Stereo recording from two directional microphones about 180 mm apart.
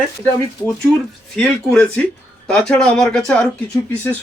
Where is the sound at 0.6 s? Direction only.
20° left (ahead or behind).